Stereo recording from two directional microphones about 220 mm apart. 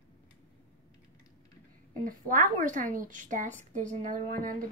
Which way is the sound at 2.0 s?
35° right (ahead or behind).